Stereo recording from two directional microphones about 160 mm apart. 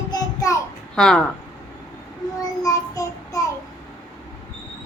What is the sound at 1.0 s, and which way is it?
Speech, 5° left (ahead or behind).